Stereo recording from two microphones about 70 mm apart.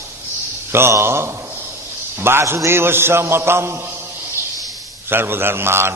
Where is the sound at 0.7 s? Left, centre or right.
Right.